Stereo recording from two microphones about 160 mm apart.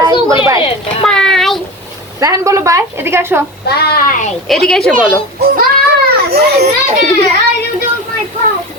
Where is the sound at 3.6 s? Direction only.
80° left; by 4.3 s 55° left (ahead or behind).